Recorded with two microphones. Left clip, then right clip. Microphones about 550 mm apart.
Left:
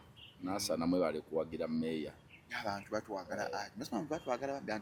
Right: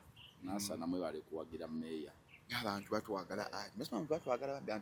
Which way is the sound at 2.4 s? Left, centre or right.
Right.